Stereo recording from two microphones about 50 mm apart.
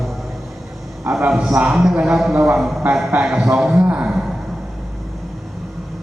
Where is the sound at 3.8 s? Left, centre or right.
Centre.